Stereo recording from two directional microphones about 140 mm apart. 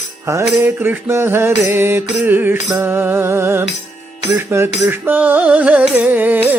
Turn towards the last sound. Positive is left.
turn(degrees=-10)  # may be behind; listen again after turning